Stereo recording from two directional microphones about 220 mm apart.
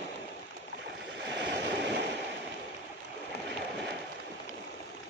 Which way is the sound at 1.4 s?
50° right (ahead or behind).